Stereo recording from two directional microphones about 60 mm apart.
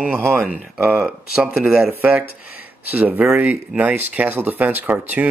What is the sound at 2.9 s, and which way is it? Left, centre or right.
Speech, right.